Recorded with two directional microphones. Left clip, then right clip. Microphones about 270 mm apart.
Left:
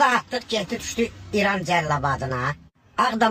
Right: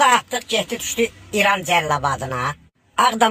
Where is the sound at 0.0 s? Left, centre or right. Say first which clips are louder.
Right 4 dB; centre.